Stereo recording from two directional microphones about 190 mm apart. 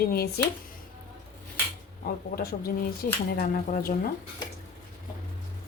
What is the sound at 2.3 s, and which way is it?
Speech, 55° left (ahead or behind).